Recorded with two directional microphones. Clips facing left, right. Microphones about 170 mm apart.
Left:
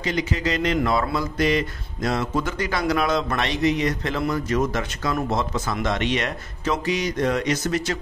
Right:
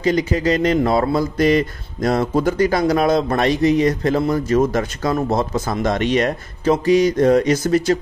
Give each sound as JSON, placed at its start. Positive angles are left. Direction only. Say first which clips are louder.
{"t": 0.0, "sound": "speech", "louder": "right 7 dB", "side_deg": -40}